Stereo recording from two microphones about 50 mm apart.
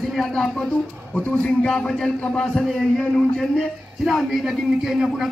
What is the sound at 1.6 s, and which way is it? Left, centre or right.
Speech, centre.